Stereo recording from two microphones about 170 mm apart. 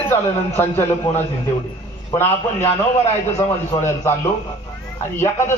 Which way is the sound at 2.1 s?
15° left (ahead or behind).